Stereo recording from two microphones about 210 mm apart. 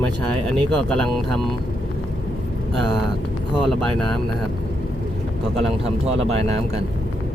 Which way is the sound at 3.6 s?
5° left (ahead or behind).